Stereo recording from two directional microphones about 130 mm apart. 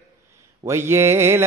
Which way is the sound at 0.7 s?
20° right (ahead or behind).